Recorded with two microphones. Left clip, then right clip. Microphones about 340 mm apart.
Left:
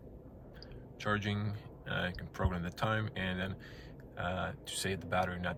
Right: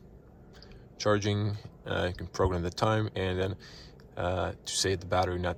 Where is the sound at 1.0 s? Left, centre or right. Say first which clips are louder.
Right 8 dB; centre.